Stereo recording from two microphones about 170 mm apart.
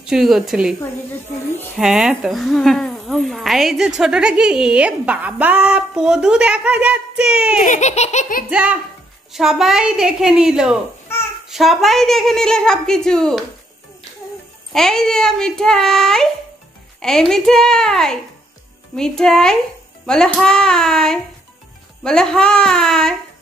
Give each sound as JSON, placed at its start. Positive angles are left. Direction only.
{"t": 0.0, "sound": "speech", "side_deg": 0}
{"t": 1.8, "sound": "speech", "side_deg": -5}
{"t": 7.6, "sound": "laughter", "side_deg": 45}
{"t": 8.5, "sound": "speech", "side_deg": -5}
{"t": 11.1, "sound": "babbling", "side_deg": 15}
{"t": 11.4, "sound": "speech", "side_deg": 0}
{"t": 14.7, "sound": "speech", "side_deg": 5}